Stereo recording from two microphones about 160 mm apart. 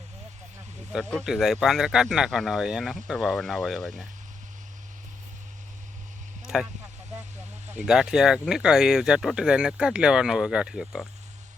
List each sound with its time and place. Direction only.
0.9 s speech: centre (ahead or behind)
6.4 s a sound: 5° right (ahead or behind)
7.7 s speech: 5° right (ahead or behind)